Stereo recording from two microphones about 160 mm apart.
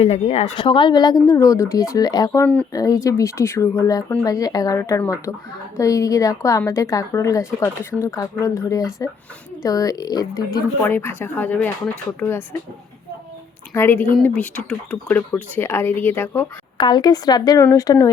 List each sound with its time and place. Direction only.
0.0 s speech: 45° left (ahead or behind)
0.5 s speech: 30° left (ahead or behind)
2.4 s speech: 10° left (ahead or behind)
2.7 s speech: 20° left (ahead or behind)
10.8 s speech: 15° left (ahead or behind)
13.7 s speech: 15° left (ahead or behind)
16.7 s speech: 30° left (ahead or behind)